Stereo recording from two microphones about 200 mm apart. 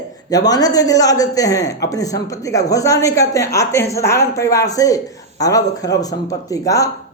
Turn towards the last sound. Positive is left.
turn(degrees=15)  # may be behind; listen again after turning